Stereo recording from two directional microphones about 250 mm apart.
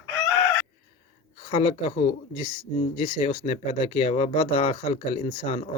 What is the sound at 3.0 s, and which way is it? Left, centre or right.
Speech, left.